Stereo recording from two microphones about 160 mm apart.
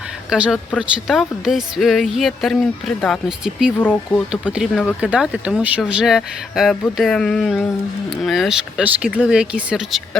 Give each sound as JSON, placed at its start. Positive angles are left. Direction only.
{"t": 0.3, "sound": "speech", "side_deg": -5}